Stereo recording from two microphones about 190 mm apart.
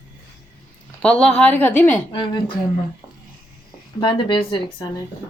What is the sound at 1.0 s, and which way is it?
Speech, 5° left (ahead or behind).